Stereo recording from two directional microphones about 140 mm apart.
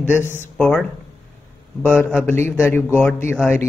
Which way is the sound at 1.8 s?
10° left (ahead or behind).